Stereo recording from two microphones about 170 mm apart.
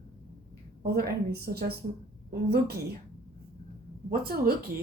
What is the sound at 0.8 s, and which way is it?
A woman's voice, 65° right (ahead or behind).